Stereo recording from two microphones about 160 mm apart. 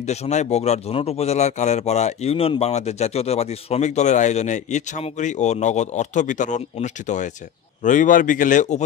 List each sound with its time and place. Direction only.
0.0 s speech: 45° left (ahead or behind)